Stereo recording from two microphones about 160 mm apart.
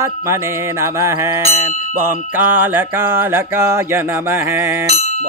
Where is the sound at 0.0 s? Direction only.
20° right (ahead or behind).